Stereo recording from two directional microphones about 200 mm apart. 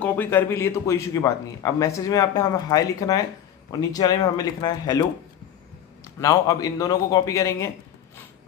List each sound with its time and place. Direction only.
0.0 s a man's voice: 10° left (ahead or behind)
6.2 s a man's voice: 20° left (ahead or behind)